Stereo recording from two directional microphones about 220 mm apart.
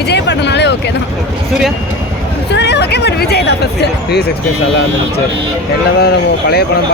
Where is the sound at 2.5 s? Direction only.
50° left (ahead or behind).